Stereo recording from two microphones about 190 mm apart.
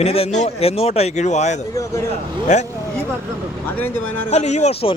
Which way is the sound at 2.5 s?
35° left (ahead or behind).